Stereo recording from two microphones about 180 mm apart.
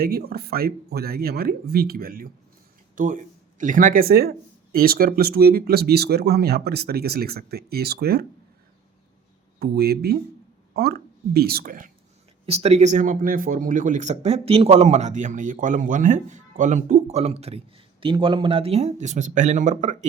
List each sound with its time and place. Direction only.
0.0 s speech: 60° right (ahead or behind)
9.6 s speech: 60° right (ahead or behind)
12.5 s speech: 35° right (ahead or behind)